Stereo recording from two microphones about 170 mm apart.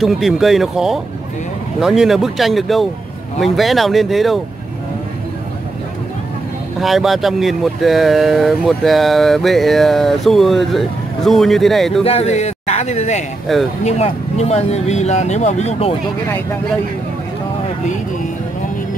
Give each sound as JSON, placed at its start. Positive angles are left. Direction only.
{"t": 0.0, "sound": "speech", "side_deg": 0}
{"t": 6.8, "sound": "speech", "side_deg": 0}
{"t": 12.0, "sound": "speech", "side_deg": 35}
{"t": 13.5, "sound": "speech", "side_deg": 0}
{"t": 13.8, "sound": "speech", "side_deg": 40}